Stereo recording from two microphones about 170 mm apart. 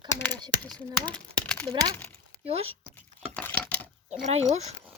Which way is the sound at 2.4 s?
35° right (ahead or behind).